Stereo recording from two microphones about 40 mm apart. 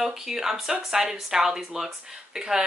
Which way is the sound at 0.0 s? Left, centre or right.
Centre.